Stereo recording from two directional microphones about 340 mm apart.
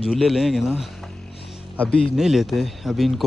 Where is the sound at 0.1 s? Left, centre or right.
Centre.